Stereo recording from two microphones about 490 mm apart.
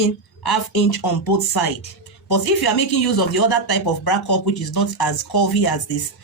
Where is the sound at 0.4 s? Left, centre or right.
Left.